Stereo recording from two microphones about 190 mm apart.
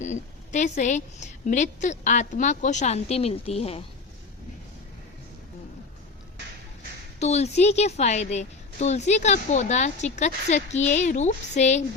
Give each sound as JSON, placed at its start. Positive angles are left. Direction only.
{"t": 0.0, "sound": "a woman's voice", "side_deg": 40}
{"t": 7.2, "sound": "a woman's voice", "side_deg": 35}